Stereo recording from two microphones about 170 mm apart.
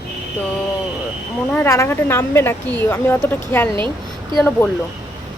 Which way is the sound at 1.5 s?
15° left (ahead or behind).